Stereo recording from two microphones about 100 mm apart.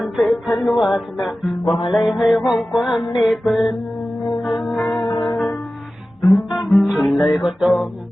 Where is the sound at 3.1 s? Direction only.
Centre (ahead or behind).